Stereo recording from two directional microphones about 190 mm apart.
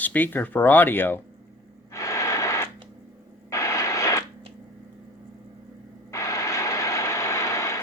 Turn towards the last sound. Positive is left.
turn(degrees=15)  # may be behind; listen again after turning